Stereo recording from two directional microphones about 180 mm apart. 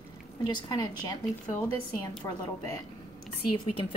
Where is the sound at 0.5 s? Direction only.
25° left (ahead or behind).